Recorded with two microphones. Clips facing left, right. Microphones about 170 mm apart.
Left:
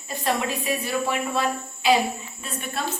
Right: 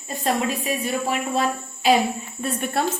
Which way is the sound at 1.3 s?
35° right (ahead or behind).